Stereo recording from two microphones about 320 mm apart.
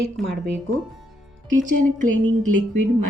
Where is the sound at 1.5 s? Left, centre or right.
Right.